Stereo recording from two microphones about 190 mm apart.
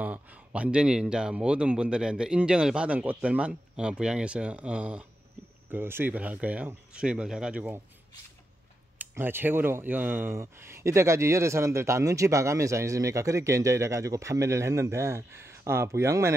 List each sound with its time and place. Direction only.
0.0 s a man's voice: 5° right (ahead or behind)
8.9 s speech: 10° right (ahead or behind)